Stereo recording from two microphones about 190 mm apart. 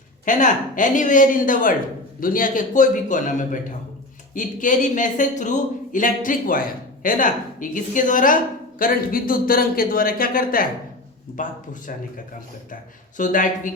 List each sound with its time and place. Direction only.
0.3 s speech: 40° left (ahead or behind)